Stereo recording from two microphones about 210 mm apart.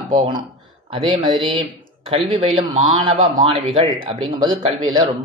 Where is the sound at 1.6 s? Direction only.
25° right (ahead or behind).